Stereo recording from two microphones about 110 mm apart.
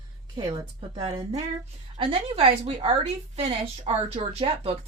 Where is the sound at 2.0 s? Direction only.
60° right (ahead or behind).